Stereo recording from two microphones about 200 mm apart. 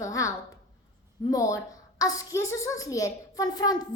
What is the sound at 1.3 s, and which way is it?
A child's voice, 15° left (ahead or behind).